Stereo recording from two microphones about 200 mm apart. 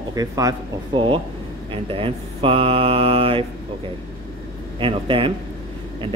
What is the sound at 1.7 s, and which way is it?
Speech, 25° right (ahead or behind).